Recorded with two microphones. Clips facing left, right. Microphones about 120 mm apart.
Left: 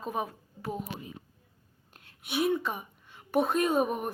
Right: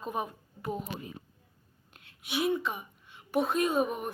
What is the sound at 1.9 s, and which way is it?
A woman's voice, 50° left (ahead or behind).